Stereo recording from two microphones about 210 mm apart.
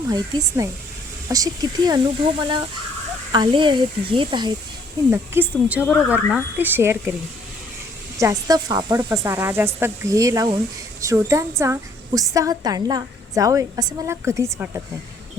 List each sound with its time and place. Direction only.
0.1 s a woman's voice: 20° right (ahead or behind)
3.3 s speech: 20° right (ahead or behind)
5.1 s a woman's voice: 10° right (ahead or behind)
8.2 s a woman's voice: 15° right (ahead or behind)